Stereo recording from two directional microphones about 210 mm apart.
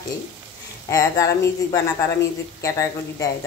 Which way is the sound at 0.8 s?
15° left (ahead or behind).